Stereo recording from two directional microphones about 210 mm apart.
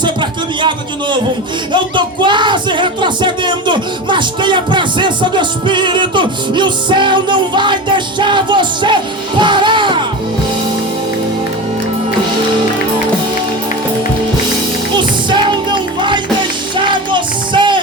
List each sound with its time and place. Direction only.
0.0 s a sound: 20° right (ahead or behind)
1.7 s music: 20° right (ahead or behind)
14.9 s music: 20° right (ahead or behind)